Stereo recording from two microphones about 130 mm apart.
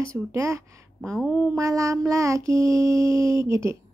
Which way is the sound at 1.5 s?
25° right (ahead or behind).